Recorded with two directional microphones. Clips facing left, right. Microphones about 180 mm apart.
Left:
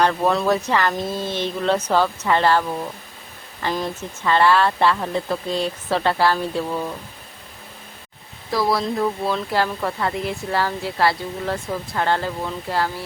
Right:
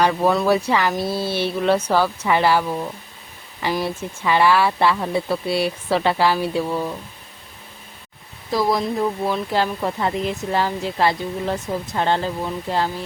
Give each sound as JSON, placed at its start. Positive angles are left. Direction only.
{"t": 0.0, "sound": "speech", "side_deg": -5}
{"t": 8.5, "sound": "speech", "side_deg": -15}